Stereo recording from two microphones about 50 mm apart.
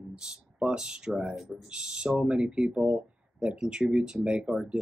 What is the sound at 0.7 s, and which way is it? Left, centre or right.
Speech, centre.